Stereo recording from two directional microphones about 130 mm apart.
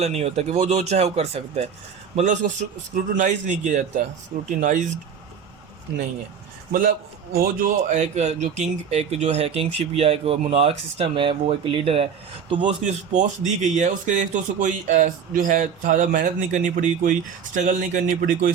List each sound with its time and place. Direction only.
0.0 s speech: 55° right (ahead or behind)
2.1 s a man's voice: 70° right (ahead or behind)
6.7 s a man's voice: 90° right
7.6 s speech: 65° right (ahead or behind); by 12.0 s 45° right (ahead or behind)
12.6 s a man's voice: 70° right (ahead or behind)